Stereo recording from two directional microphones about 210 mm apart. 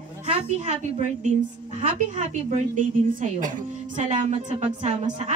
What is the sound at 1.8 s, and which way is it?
A woman's voice, 30° right (ahead or behind).